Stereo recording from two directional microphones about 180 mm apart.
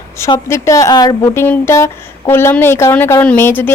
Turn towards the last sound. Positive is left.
turn(degrees=10)  # may be behind; listen again after turning